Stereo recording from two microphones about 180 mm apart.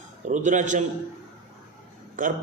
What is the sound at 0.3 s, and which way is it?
Speech, 45° right (ahead or behind).